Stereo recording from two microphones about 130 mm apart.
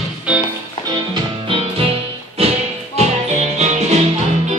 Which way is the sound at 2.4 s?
50° right (ahead or behind).